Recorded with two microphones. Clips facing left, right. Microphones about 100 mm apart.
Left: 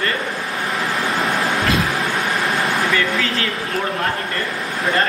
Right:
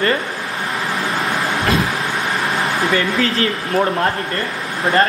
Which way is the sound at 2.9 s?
35° right (ahead or behind).